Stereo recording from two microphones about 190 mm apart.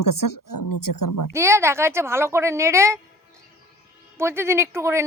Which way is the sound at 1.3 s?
15° right (ahead or behind).